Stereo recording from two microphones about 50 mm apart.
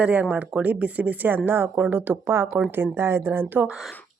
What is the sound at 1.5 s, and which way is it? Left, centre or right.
Speech, right.